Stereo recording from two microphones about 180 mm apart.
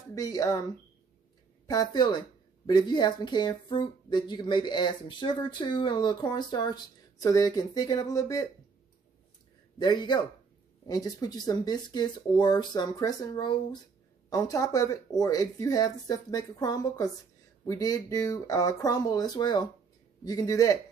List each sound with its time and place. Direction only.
0.1 s speech: 20° left (ahead or behind)
1.7 s speech: 20° left (ahead or behind)
9.8 s speech: 25° left (ahead or behind)